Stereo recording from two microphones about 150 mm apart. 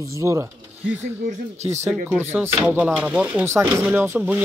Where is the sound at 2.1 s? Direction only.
15° right (ahead or behind).